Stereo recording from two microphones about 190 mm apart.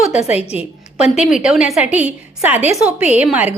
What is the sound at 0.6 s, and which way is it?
A woman's voice, 5° right (ahead or behind).